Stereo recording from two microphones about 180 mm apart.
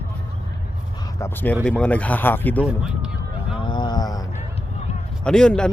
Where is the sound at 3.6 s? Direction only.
25° left (ahead or behind).